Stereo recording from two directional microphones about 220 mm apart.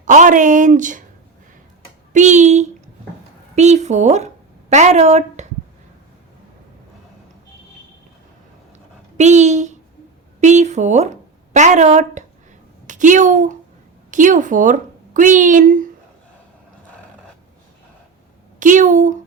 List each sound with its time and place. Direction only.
0.0 s a woman's voice: 35° right (ahead or behind)
2.1 s a woman's voice: 35° right (ahead or behind)
9.1 s a woman's voice: 30° right (ahead or behind)
18.6 s a woman's voice: 35° right (ahead or behind)